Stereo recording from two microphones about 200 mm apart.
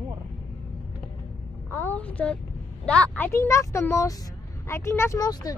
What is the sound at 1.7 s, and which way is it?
Speech, 10° left (ahead or behind).